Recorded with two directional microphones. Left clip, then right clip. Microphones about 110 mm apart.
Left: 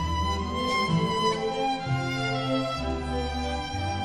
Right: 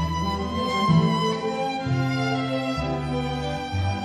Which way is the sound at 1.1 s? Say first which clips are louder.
Right 1 dB; 50° left (ahead or behind).